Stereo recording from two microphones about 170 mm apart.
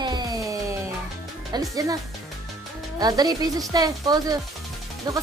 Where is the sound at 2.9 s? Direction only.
20° right (ahead or behind).